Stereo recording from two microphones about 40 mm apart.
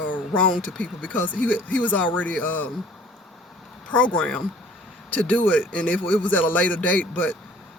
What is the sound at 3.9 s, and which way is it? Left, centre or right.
Speech, left.